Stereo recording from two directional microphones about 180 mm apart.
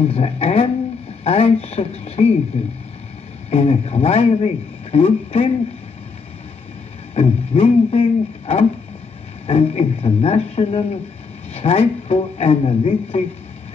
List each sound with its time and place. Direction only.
0.0 s speech: 35° left (ahead or behind)
7.2 s speech: 30° left (ahead or behind)
11.5 s a sound: 35° left (ahead or behind)
12.1 s speech: 35° left (ahead or behind)